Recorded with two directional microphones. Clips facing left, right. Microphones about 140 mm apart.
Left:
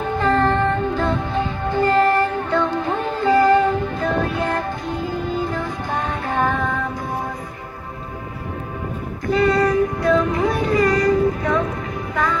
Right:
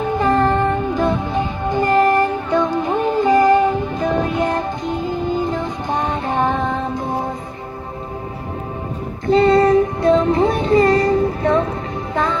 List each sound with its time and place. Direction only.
0.2 s music: 15° right (ahead or behind)
9.3 s music: 25° right (ahead or behind)